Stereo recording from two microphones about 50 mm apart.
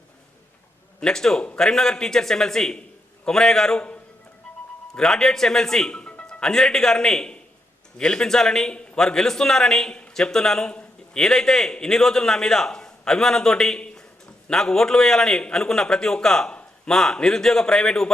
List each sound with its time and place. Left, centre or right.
0.9 s a man's voice: centre
3.8 s a man's voice: left
4.9 s a man's voice: centre